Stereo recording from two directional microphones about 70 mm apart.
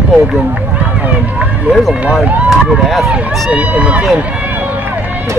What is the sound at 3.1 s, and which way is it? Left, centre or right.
Speech, centre.